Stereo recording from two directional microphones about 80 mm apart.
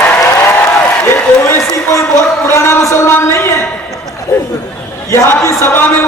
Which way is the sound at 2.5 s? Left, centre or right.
Left.